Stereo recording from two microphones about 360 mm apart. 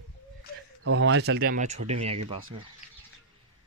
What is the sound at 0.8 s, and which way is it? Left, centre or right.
Speech, right.